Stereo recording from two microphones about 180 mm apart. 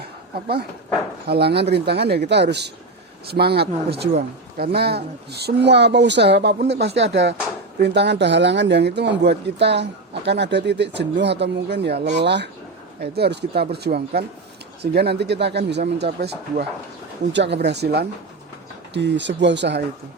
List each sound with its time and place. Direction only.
0.0 s dog: 60° right (ahead or behind)
1.3 s speech: 65° right (ahead or behind)
17.3 s speech: 75° right (ahead or behind)
18.9 s speech: 80° right